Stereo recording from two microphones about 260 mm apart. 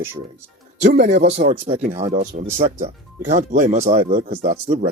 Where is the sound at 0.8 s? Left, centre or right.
Right.